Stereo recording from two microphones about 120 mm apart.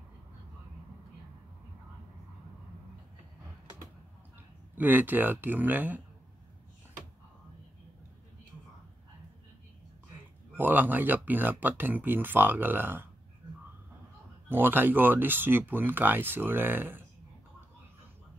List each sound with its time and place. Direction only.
4.7 s speech: 15° right (ahead or behind)
10.5 s speech: 15° right (ahead or behind)
14.5 s speech: 15° right (ahead or behind)